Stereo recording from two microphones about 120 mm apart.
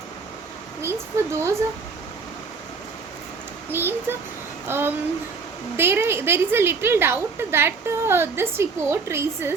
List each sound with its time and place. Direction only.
0.8 s a woman's voice: 20° right (ahead or behind)
3.7 s a child's voice: 20° right (ahead or behind)